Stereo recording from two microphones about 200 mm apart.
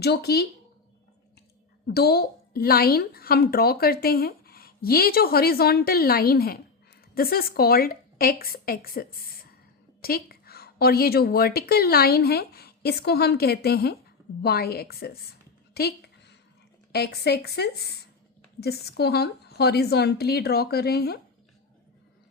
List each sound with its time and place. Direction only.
0.0 s a woman's voice: 55° left (ahead or behind)
1.9 s a woman's voice: 50° left (ahead or behind)